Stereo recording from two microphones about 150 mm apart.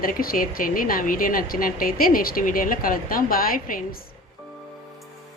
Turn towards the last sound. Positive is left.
turn(degrees=70)  # may be behind; listen again after turning